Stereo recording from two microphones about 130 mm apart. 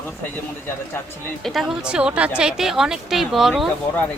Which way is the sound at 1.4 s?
Centre (ahead or behind).